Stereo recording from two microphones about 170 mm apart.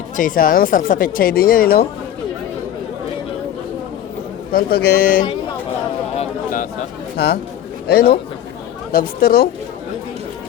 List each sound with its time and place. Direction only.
0.2 s speech: 55° left (ahead or behind)
4.5 s speech: 65° left (ahead or behind)
7.2 s speech: 70° left (ahead or behind)